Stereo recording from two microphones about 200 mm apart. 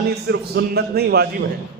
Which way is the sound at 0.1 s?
55° right (ahead or behind).